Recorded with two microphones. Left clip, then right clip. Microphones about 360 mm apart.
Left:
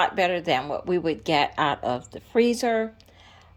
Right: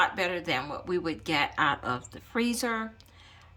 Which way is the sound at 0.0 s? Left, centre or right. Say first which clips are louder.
Left 5 dB; centre.